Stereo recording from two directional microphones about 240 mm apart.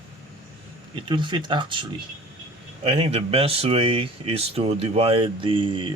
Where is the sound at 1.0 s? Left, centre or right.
Centre.